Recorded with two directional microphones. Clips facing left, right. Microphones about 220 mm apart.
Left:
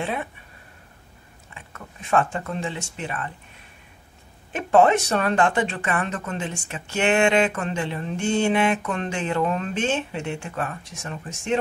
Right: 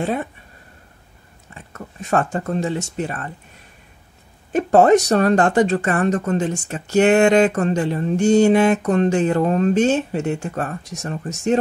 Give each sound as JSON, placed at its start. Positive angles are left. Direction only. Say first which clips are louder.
{"t": 0.0, "sound": "speech", "louder": "right 6 dB", "side_deg": -40}
{"t": 1.5, "sound": "speech", "louder": "right 6 dB", "side_deg": -40}
{"t": 4.5, "sound": "speech", "louder": "right 5 dB", "side_deg": -40}